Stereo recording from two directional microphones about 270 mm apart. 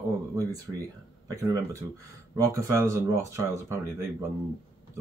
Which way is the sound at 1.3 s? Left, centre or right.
Centre.